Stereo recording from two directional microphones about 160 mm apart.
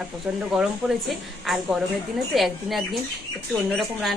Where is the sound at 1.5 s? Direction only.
5° right (ahead or behind).